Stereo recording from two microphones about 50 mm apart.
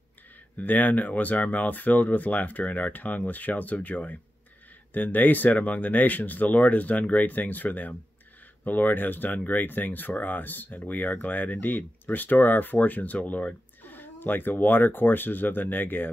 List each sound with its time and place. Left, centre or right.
0.6 s speech: left